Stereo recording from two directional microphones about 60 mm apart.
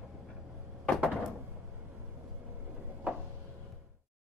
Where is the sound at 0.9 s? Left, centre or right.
Left.